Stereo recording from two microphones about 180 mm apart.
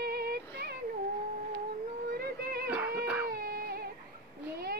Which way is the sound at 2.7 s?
10° right (ahead or behind).